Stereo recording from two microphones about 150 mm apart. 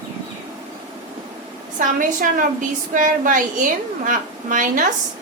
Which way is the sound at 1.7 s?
60° right (ahead or behind).